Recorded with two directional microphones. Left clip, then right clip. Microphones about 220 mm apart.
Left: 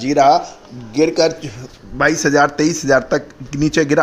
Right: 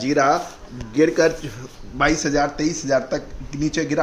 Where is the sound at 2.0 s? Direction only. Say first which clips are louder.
Left 6 dB; 30° left (ahead or behind).